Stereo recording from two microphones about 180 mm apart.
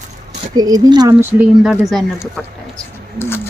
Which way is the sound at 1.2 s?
10° right (ahead or behind).